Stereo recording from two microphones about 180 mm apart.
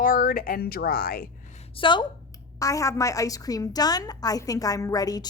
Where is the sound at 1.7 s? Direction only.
25° left (ahead or behind).